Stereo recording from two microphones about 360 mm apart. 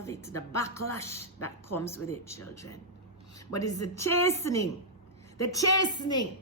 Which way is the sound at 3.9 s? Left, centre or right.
Centre.